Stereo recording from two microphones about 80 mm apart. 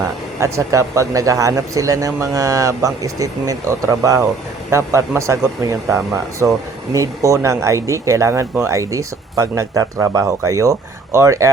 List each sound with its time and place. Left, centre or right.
0.3 s a man's voice: right